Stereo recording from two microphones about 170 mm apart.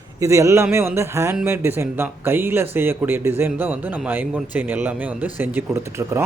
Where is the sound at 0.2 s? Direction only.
15° right (ahead or behind).